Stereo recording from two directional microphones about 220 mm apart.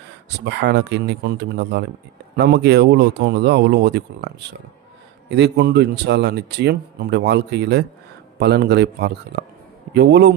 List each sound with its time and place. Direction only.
0.3 s speech: 50° right (ahead or behind)
5.3 s speech: 50° right (ahead or behind)